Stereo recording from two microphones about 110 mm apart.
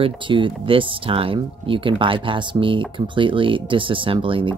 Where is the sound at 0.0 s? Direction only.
50° right (ahead or behind).